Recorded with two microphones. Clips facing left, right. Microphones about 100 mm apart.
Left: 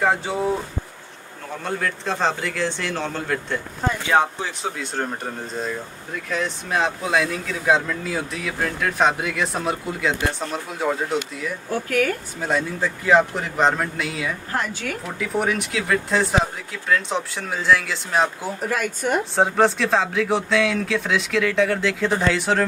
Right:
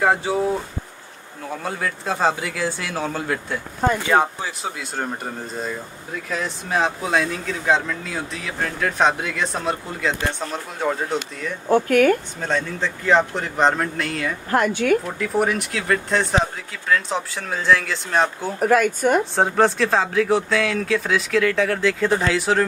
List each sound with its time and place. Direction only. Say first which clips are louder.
0.0 s speech: right 2 dB; centre (ahead or behind)
1.6 s speech: left 2 dB; 5° right (ahead or behind)
11.7 s speech: right 7 dB; 55° right (ahead or behind)
12.4 s speech: left 1 dB; 10° left (ahead or behind)
14.5 s a woman's voice: right 10 dB; 55° right (ahead or behind)
15.1 s speech: right 2 dB; centre (ahead or behind)
18.6 s speech: right 9 dB; 50° right (ahead or behind)
19.3 s speech: even; centre (ahead or behind)